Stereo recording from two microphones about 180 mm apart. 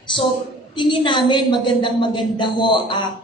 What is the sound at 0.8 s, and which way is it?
Speech, 25° left (ahead or behind).